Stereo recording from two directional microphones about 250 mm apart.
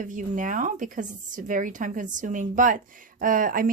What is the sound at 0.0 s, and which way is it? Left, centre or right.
Speech, right.